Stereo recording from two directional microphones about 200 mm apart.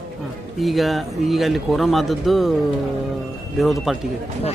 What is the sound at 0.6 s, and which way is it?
Speech, centre (ahead or behind).